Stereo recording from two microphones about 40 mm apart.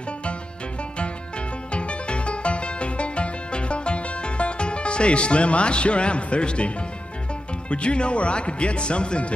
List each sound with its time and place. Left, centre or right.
1.7 s music: left
7.7 s speech: left